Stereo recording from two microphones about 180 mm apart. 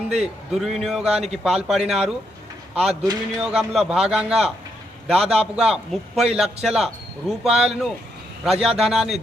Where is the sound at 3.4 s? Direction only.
5° right (ahead or behind).